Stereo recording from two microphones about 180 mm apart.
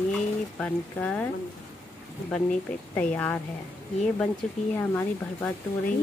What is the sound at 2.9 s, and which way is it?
Speech, 10° left (ahead or behind).